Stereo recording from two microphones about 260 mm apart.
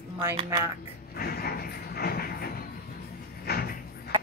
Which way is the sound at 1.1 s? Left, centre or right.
Left.